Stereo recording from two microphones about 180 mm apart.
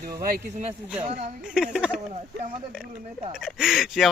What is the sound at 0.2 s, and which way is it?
Speech, 55° right (ahead or behind).